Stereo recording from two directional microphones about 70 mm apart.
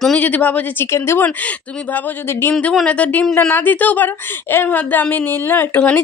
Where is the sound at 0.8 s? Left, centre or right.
Left.